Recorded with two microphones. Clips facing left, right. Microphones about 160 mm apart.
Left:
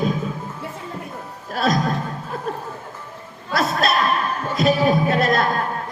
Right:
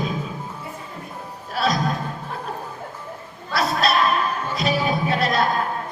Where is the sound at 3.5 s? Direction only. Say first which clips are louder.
Left 1 dB; 45° left (ahead or behind).